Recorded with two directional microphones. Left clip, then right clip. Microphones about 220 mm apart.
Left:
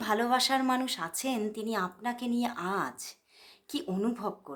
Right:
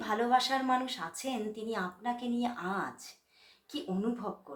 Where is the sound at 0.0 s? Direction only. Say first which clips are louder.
Left 1 dB; 50° left (ahead or behind).